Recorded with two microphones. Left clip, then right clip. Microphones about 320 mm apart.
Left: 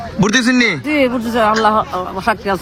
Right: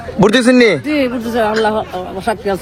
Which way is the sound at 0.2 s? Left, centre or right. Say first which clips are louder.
Right 4 dB; centre.